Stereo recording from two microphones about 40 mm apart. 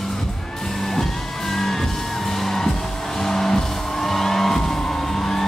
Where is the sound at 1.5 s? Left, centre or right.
Centre.